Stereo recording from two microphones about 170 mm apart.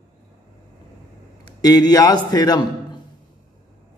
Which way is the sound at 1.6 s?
20° left (ahead or behind).